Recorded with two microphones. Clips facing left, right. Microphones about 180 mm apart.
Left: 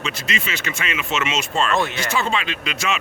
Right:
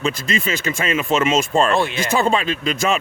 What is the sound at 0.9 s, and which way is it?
Speech, 40° right (ahead or behind).